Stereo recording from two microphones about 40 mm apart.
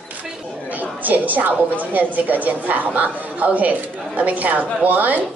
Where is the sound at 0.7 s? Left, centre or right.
Right.